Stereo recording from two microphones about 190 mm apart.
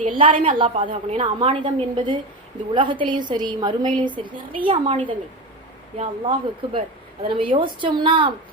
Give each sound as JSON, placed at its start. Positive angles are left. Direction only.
{"t": 0.0, "sound": "a woman's voice", "side_deg": -25}
{"t": 6.0, "sound": "a woman's voice", "side_deg": -30}